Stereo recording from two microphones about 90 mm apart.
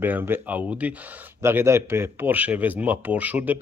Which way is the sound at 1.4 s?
30° right (ahead or behind).